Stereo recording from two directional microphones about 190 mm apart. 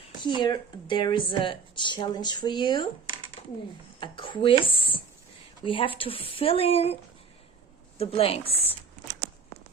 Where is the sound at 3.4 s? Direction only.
35° left (ahead or behind).